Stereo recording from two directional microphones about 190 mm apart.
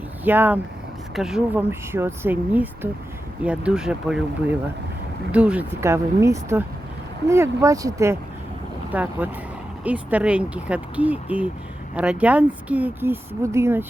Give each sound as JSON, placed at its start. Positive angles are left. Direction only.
{"t": 0.3, "sound": "speech", "side_deg": -10}